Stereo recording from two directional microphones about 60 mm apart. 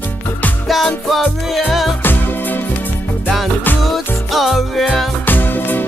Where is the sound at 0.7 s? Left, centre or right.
Centre.